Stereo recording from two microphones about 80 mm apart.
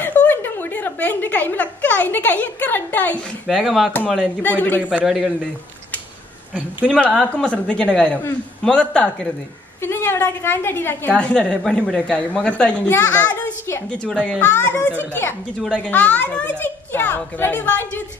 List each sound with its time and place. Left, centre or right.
0.0 s a woman's voice: left
3.4 s speech: centre
4.4 s a child's voice: left
5.0 s speech: centre
6.9 s a woman's voice: centre
9.8 s a woman's voice: left
11.1 s a woman's voice: centre
14.5 s a child's voice: left